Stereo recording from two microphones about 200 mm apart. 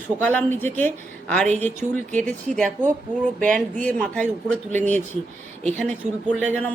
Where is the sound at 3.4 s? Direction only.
40° right (ahead or behind).